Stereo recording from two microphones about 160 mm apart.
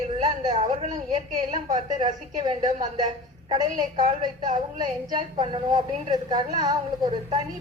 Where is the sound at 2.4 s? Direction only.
35° right (ahead or behind).